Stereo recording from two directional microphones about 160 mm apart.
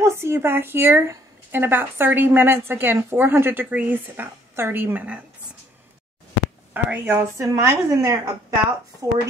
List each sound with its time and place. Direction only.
0.0 s speech: 15° right (ahead or behind)
6.7 s a woman's voice: 10° right (ahead or behind)